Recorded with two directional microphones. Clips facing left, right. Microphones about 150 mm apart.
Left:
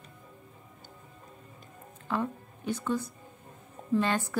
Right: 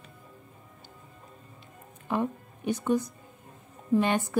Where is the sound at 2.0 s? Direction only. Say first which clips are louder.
Right 3 dB; 15° right (ahead or behind).